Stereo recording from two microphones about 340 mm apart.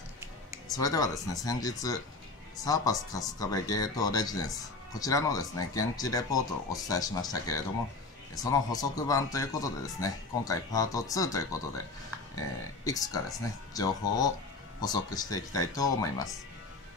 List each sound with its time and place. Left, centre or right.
0.7 s speech: centre